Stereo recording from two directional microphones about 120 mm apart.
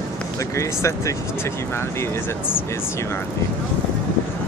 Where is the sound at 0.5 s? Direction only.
25° left (ahead or behind).